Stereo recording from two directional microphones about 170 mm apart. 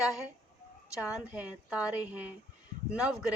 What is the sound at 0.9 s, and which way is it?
Speech, 5° right (ahead or behind).